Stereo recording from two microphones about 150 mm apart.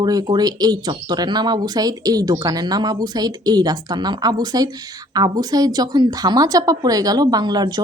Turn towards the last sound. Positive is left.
turn(degrees=-25)  # may be behind; listen again after turning